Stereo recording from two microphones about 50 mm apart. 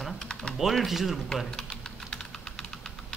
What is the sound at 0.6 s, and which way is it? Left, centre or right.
Speech, centre.